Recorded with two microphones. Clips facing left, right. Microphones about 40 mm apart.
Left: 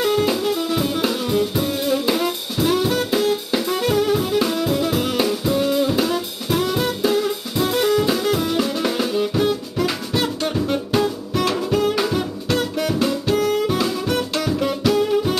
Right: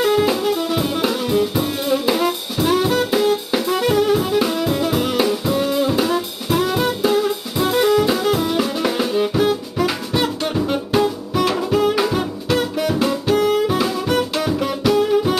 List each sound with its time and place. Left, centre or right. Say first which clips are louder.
0.0 s music: right 2 dB; centre